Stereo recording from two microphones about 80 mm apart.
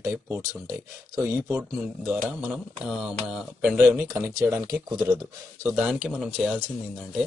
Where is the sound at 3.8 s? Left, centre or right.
Right.